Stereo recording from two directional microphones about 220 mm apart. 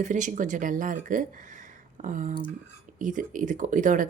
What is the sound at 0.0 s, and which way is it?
Speech, 35° right (ahead or behind).